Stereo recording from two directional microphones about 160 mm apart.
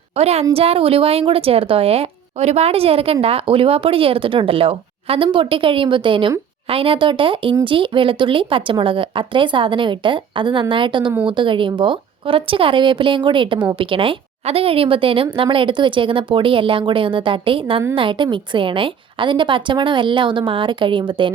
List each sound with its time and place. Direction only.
0.2 s speech: 40° right (ahead or behind)